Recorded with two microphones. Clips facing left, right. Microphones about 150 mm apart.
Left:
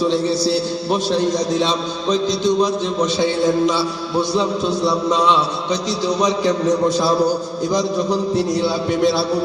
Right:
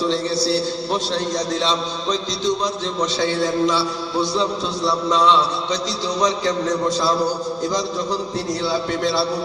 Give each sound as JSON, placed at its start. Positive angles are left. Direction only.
{"t": 0.9, "sound": "a man's voice", "side_deg": 15}
{"t": 3.2, "sound": "a man's voice", "side_deg": 15}
{"t": 4.9, "sound": "a man's voice", "side_deg": 15}
{"t": 8.6, "sound": "a man's voice", "side_deg": 15}